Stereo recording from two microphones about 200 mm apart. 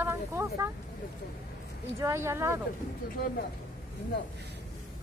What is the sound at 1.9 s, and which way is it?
Speech, 15° right (ahead or behind).